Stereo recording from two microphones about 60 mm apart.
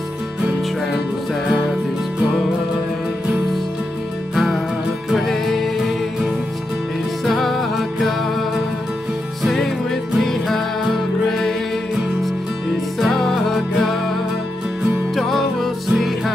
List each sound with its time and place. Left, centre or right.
5.1 s music: centre
7.2 s music: centre
9.4 s music: centre
13.3 s music: centre
15.1 s music: centre